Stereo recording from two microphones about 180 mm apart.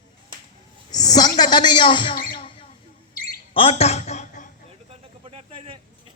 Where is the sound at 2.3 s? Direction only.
30° left (ahead or behind).